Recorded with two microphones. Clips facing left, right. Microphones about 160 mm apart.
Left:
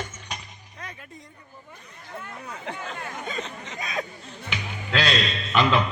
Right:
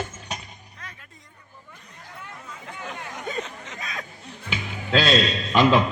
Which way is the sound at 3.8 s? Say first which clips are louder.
Left 6 dB; 10° left (ahead or behind).